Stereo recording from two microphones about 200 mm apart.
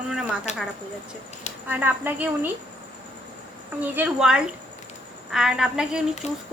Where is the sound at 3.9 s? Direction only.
5° right (ahead or behind).